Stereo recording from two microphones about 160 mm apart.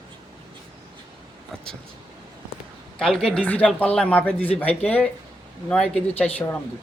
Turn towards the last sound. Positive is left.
turn(degrees=10)  # may be behind; listen again after turning